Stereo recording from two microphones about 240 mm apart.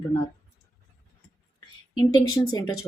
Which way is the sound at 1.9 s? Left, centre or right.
Centre.